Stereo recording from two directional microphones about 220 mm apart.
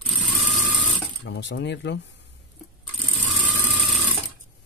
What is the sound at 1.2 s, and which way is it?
Speech, 50° left (ahead or behind).